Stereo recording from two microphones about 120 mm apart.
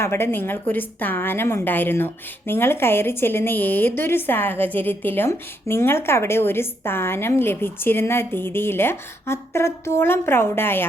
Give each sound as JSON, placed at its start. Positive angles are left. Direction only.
{"t": 0.0, "sound": "a woman's voice", "side_deg": 20}